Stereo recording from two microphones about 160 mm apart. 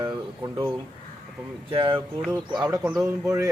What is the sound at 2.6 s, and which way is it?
Speech, 5° right (ahead or behind).